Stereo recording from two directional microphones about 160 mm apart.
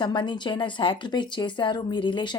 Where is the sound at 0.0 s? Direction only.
30° left (ahead or behind).